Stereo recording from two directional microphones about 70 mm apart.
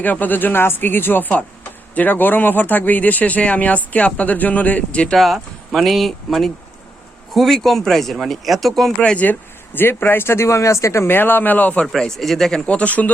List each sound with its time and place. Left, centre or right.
0.0 s speech: left
5.1 s speech: centre
9.0 s speech: centre
11.9 s speech: centre
12.6 s speech: centre